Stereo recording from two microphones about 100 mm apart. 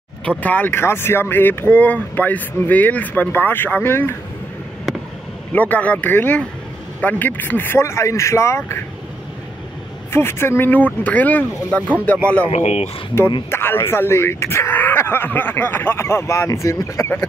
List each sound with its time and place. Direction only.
0.4 s speech: 15° left (ahead or behind)
5.5 s speech: 15° left (ahead or behind)
10.1 s speech: 25° left (ahead or behind)
12.4 s speech: 90° left
13.5 s speech: 20° left (ahead or behind)